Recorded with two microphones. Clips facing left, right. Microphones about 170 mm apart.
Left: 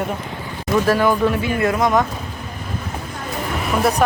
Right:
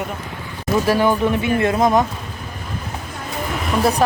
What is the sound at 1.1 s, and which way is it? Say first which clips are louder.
Speech: even; 25° right (ahead or behind).